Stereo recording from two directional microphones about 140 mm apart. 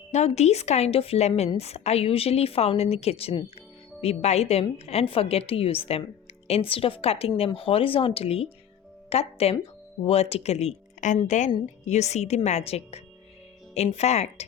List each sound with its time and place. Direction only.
0.1 s a woman's voice: 50° left (ahead or behind)